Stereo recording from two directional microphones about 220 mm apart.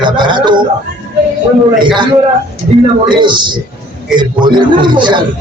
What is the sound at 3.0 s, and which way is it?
A man's voice, 20° right (ahead or behind).